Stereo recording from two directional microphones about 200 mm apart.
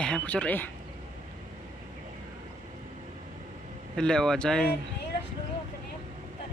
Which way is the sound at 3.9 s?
5° left (ahead or behind).